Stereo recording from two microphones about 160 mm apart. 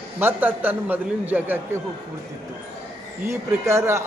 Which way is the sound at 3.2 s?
15° right (ahead or behind).